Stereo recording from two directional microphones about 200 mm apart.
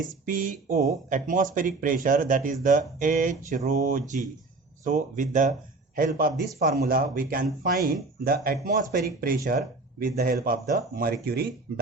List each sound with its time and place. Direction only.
0.0 s speech: 40° right (ahead or behind)